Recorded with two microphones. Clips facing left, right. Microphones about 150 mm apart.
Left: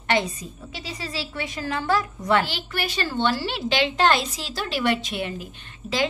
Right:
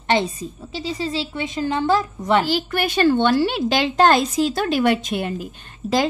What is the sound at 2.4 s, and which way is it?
A woman's voice, 45° right (ahead or behind).